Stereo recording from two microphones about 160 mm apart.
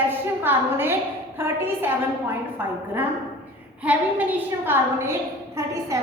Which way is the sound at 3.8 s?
10° right (ahead or behind).